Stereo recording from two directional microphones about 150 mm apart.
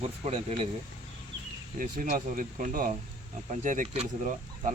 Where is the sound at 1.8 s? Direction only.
70° right (ahead or behind).